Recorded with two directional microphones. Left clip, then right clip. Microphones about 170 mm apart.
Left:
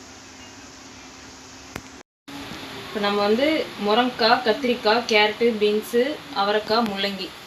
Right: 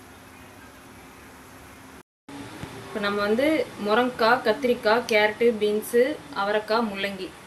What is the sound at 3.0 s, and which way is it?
Speech, 10° left (ahead or behind).